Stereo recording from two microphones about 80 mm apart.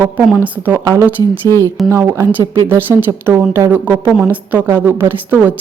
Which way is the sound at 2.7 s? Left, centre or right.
Right.